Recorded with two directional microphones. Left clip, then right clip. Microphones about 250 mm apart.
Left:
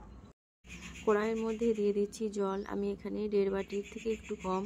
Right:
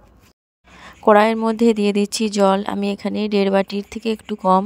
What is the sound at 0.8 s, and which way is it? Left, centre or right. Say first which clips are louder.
Speech: right 18 dB; right.